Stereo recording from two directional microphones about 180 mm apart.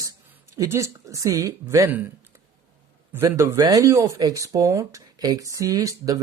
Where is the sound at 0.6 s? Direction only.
15° right (ahead or behind).